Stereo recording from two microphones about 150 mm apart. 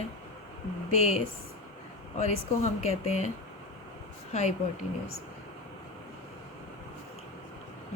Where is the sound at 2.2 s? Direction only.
45° left (ahead or behind).